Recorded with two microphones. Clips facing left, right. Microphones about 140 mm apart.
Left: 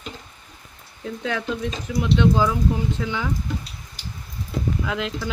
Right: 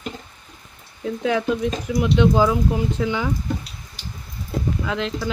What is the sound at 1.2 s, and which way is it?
Speech, 10° right (ahead or behind).